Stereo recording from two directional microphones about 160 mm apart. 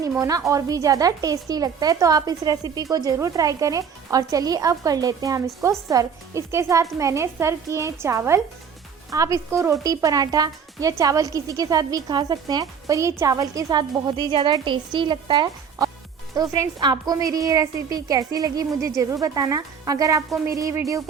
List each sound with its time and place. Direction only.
0.2 s speech: 20° right (ahead or behind)